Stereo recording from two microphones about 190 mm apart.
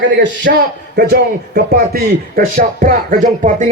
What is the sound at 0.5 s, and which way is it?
A man's voice, 60° right (ahead or behind).